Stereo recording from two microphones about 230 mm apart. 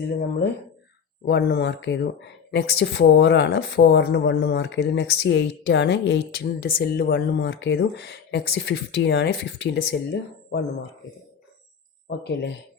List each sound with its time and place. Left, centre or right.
1.2 s speech: left
12.0 s speech: left